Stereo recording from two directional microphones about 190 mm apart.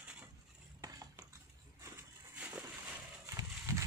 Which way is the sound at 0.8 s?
20° right (ahead or behind).